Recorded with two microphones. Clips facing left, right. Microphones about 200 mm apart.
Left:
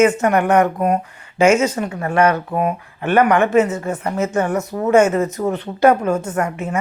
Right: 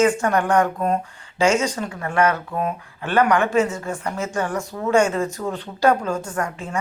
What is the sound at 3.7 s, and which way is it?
A woman's voice, 20° left (ahead or behind).